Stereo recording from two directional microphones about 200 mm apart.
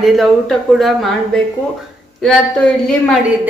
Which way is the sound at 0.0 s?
Centre (ahead or behind).